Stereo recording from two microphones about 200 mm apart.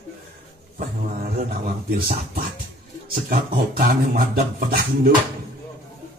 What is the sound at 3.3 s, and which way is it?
Speech, 45° right (ahead or behind).